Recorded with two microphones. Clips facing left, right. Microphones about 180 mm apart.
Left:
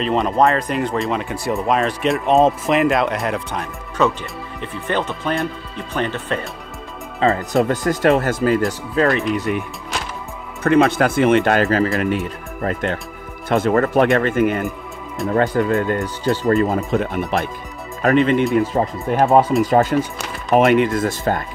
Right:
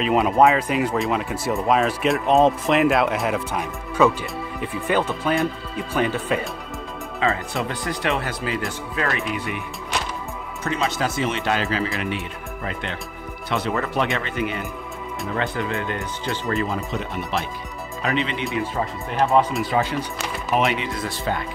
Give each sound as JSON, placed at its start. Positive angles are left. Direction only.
{"t": 0.0, "sound": "speech", "side_deg": -5}
{"t": 7.2, "sound": "speech", "side_deg": 40}
{"t": 10.6, "sound": "speech", "side_deg": 55}